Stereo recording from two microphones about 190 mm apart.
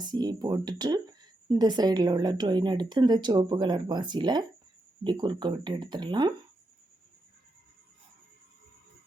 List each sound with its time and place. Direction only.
0.0 s speech: 20° right (ahead or behind)